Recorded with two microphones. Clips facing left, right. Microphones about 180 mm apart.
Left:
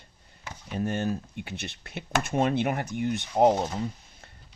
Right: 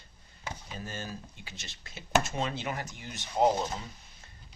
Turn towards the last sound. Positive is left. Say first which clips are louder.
# left 5 dB
turn(degrees=55)  # may be behind; listen again after turning